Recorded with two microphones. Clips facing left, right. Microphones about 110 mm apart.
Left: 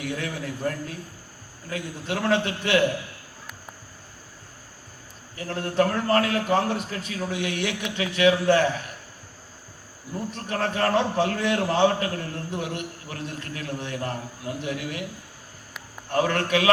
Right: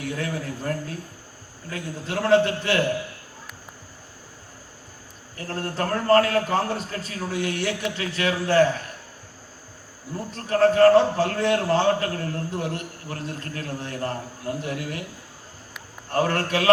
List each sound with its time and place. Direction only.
0.0 s a man's voice: 40° right (ahead or behind)
5.4 s a man's voice: 40° right (ahead or behind)
10.3 s a man's voice: 40° right (ahead or behind)
16.1 s a man's voice: 40° right (ahead or behind)